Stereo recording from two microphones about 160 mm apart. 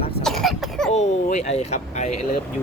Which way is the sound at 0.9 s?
45° left (ahead or behind).